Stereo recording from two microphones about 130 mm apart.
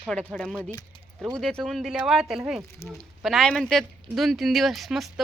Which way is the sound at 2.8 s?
20° left (ahead or behind).